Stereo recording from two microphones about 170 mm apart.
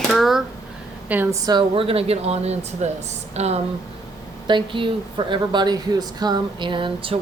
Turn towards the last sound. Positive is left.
turn(degrees=-30)  # may be behind; listen again after turning